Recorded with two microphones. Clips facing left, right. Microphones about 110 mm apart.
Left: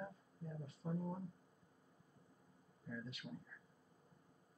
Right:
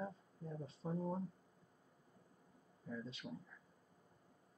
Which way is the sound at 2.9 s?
30° right (ahead or behind).